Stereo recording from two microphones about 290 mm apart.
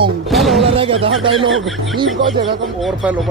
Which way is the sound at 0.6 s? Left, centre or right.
Centre.